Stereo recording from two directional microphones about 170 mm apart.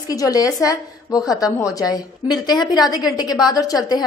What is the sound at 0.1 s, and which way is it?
A woman's voice, 20° left (ahead or behind).